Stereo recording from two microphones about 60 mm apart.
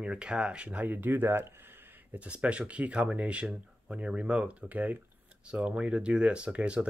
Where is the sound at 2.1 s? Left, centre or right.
Right.